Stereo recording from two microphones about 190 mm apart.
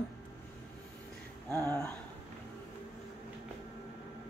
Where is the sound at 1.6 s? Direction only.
10° left (ahead or behind).